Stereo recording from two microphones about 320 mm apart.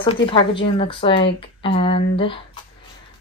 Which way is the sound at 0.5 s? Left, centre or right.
Centre.